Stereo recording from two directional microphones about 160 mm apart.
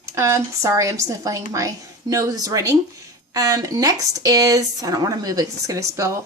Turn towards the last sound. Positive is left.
turn(degrees=-20)  # may be behind; listen again after turning